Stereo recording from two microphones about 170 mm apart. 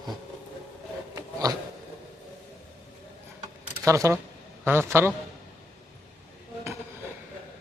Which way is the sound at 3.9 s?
20° right (ahead or behind).